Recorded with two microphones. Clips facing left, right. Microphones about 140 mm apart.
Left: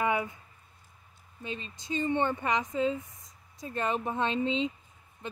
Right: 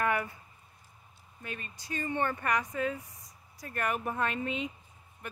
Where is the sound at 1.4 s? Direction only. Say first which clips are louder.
Left 4 dB; 20° left (ahead or behind).